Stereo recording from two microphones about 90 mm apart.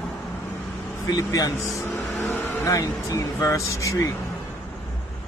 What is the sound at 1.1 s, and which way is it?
Speech, 40° left (ahead or behind).